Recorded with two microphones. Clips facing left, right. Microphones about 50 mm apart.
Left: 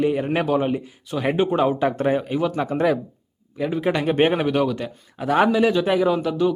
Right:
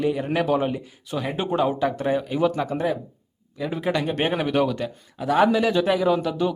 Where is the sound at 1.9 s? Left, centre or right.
Left.